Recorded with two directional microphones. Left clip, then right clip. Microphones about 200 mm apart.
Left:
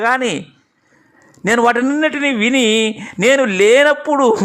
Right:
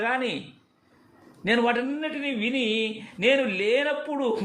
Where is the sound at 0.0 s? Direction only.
30° left (ahead or behind).